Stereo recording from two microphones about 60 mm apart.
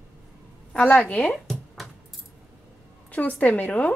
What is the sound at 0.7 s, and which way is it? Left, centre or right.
Speech, centre.